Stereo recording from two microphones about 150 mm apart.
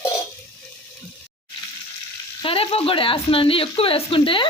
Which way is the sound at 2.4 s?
40° left (ahead or behind).